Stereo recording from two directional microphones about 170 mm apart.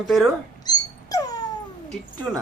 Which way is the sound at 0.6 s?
20° left (ahead or behind).